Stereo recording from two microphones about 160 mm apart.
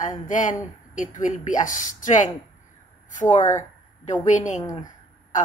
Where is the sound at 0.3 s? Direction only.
50° left (ahead or behind).